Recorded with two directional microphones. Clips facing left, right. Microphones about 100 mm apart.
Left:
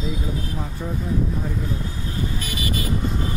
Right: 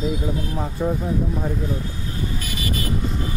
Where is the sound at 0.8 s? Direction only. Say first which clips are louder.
Right 9 dB; 40° right (ahead or behind).